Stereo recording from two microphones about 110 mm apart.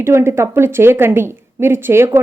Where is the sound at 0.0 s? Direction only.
25° right (ahead or behind).